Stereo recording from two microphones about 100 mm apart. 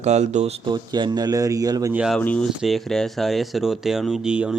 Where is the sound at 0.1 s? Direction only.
90° right.